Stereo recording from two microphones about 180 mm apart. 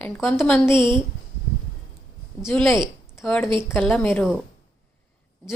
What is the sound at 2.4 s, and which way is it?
A woman's voice, centre (ahead or behind).